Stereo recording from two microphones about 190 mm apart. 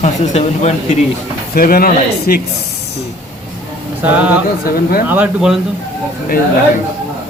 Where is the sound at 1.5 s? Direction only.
50° left (ahead or behind).